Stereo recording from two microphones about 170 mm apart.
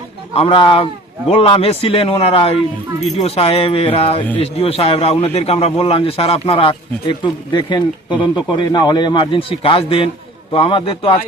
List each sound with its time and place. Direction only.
0.3 s a man's voice: 30° left (ahead or behind)